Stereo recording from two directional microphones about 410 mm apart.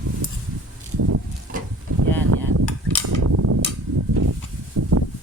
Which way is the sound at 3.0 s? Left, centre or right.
Right.